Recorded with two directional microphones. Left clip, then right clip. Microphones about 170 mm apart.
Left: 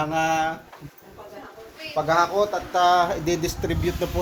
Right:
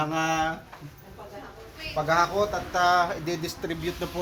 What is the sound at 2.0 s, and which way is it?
Speech, 20° left (ahead or behind).